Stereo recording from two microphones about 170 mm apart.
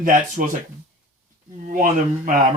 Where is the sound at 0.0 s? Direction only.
50° right (ahead or behind).